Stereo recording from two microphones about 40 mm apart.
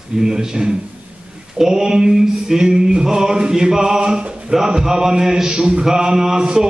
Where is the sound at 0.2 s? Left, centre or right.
Centre.